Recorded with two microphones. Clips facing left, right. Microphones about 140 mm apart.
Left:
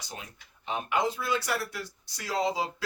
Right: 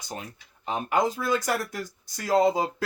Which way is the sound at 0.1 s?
40° right (ahead or behind).